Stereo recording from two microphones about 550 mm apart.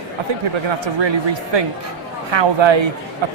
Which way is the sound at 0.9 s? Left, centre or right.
Right.